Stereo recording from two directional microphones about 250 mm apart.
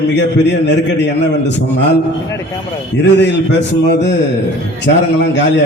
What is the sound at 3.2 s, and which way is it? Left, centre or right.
A man's voice, left.